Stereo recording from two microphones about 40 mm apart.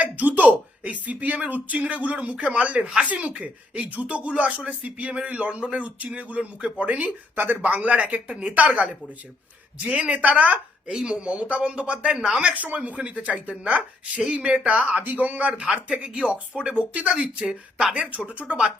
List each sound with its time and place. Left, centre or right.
0.0 s a sound: right
1.0 s speech: right
8.3 s speech: right
8.5 s speech: right
12.5 s speech: right
14.2 s speech: centre
15.1 s speech: right
16.9 s speech: right
17.2 s speech: centre
18.2 s speech: right